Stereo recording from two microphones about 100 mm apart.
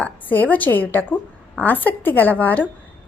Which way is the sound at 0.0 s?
15° left (ahead or behind).